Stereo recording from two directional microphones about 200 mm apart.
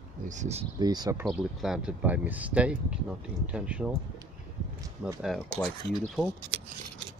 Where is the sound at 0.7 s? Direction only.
20° right (ahead or behind).